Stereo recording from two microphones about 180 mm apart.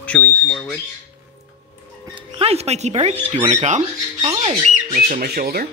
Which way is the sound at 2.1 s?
30° right (ahead or behind).